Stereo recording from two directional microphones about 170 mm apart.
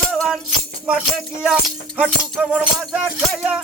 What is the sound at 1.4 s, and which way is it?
Speech, 5° right (ahead or behind).